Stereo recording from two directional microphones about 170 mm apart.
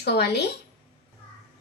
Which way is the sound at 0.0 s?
75° left (ahead or behind).